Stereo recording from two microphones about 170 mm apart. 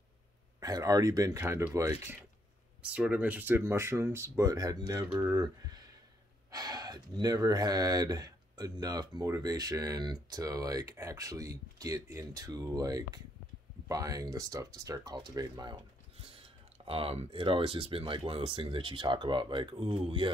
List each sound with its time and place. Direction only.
0.6 s speech: 20° right (ahead or behind)
2.8 s speech: 5° right (ahead or behind)
6.5 s speech: 20° right (ahead or behind)